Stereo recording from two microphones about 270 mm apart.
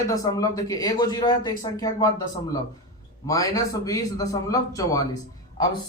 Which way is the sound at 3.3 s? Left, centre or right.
Centre.